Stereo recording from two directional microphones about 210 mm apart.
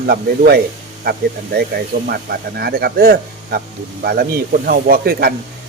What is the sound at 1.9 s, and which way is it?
Speech, 45° right (ahead or behind).